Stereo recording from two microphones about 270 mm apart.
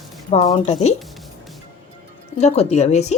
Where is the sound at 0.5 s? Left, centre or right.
Left.